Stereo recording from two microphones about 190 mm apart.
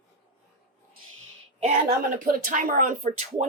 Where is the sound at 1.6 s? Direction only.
45° right (ahead or behind).